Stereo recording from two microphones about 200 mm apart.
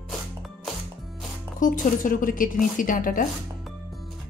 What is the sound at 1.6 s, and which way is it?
Speech, 40° left (ahead or behind).